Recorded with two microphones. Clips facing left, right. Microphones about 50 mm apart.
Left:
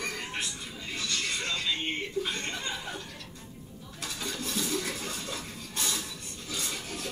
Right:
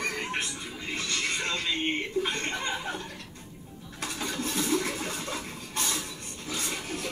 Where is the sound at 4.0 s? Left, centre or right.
Right.